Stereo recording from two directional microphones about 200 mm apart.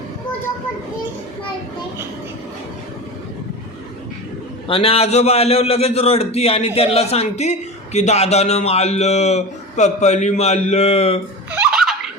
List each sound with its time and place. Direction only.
4.7 s a man's voice: 30° left (ahead or behind)
11.5 s giggle: 5° right (ahead or behind)